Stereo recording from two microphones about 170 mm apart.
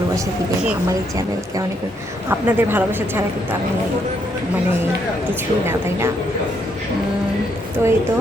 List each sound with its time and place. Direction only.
2.3 s a woman's voice: 10° right (ahead or behind)
7.8 s a woman's voice: 15° right (ahead or behind)